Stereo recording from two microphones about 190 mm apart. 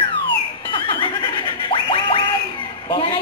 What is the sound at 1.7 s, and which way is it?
Music, 25° left (ahead or behind).